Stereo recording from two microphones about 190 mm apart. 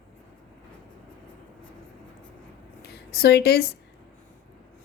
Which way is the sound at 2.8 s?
55° left (ahead or behind).